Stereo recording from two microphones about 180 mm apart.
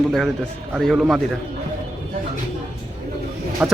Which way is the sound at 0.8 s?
Centre (ahead or behind).